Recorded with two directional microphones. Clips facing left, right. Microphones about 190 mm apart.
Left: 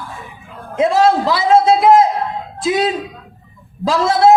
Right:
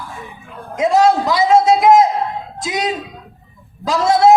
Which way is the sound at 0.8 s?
30° left (ahead or behind).